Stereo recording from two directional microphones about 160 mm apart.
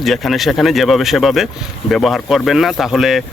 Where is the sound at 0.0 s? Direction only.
Centre (ahead or behind).